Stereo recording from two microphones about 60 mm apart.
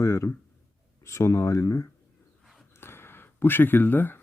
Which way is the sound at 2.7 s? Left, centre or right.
Left.